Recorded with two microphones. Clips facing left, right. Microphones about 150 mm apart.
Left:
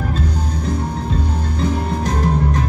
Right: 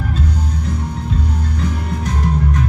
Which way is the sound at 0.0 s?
35° left (ahead or behind).